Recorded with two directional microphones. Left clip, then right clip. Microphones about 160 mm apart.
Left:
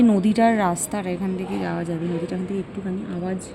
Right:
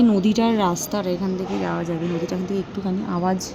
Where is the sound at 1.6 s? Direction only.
25° left (ahead or behind).